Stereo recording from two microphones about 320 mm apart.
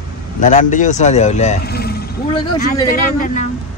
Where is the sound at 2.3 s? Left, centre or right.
Centre.